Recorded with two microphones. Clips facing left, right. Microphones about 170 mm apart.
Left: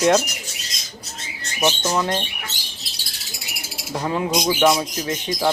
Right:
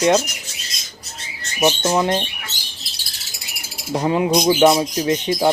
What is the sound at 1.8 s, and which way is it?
Speech, 20° right (ahead or behind).